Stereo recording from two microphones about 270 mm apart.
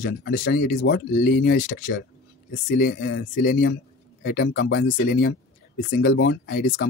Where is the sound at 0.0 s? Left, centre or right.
Left.